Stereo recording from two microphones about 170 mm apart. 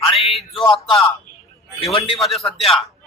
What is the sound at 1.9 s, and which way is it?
Speech, 35° left (ahead or behind).